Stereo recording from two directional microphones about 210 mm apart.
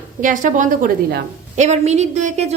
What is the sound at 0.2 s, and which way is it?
A woman's voice, 40° right (ahead or behind).